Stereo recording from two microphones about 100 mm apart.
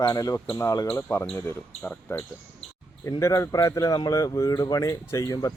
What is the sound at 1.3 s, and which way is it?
Speech, 20° left (ahead or behind).